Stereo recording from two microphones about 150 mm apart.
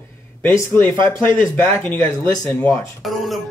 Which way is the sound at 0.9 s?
30° right (ahead or behind).